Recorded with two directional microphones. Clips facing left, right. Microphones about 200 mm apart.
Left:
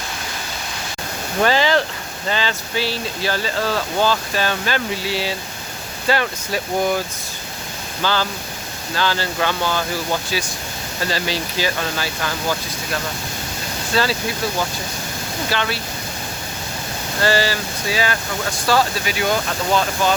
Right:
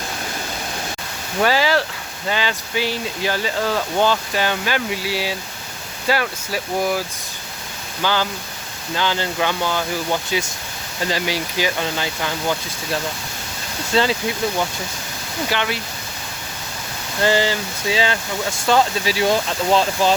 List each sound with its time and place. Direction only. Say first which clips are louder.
1.4 s speech: left 1 dB; 5° right (ahead or behind)
8.0 s speech: even; 15° right (ahead or behind)
15.4 s speech: even; 15° right (ahead or behind)
17.2 s speech: right 1 dB; 20° right (ahead or behind)